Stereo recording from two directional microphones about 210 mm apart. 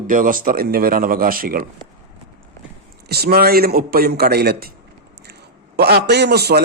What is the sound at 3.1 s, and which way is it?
A man's voice, 45° right (ahead or behind).